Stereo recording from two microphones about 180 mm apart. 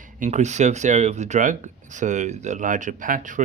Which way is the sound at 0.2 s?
40° right (ahead or behind).